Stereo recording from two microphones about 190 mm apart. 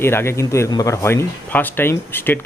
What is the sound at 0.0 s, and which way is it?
Speech, 10° left (ahead or behind).